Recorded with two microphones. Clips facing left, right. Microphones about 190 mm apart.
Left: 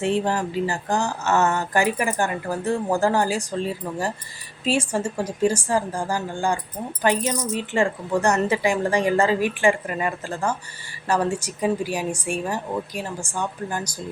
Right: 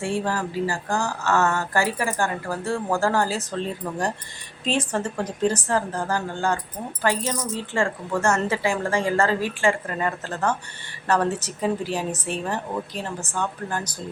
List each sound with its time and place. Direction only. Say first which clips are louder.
0.0 s speech: left 3 dB; 20° left (ahead or behind)